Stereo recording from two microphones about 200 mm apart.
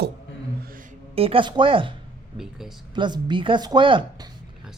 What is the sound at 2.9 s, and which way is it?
Speech, 25° right (ahead or behind).